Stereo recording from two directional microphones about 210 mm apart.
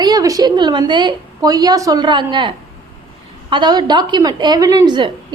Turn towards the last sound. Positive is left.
turn(degrees=-20)  # may be behind; listen again after turning